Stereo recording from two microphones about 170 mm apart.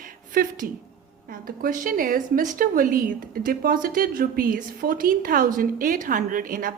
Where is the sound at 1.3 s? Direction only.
55° right (ahead or behind).